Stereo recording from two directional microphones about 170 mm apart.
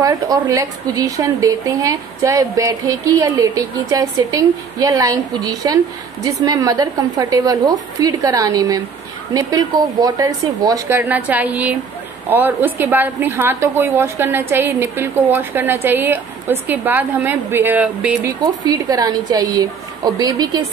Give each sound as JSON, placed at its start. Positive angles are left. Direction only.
{"t": 0.0, "sound": "a woman's voice", "side_deg": -20}
{"t": 18.4, "sound": "a woman's voice", "side_deg": -20}